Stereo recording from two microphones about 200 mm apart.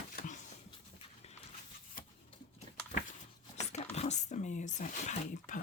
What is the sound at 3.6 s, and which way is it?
Dog, 35° left (ahead or behind).